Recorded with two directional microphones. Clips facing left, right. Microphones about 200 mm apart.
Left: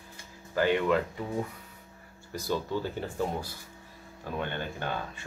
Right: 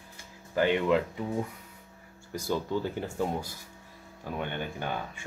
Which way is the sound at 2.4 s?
15° right (ahead or behind).